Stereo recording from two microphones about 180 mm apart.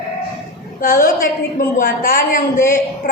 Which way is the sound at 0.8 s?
50° left (ahead or behind).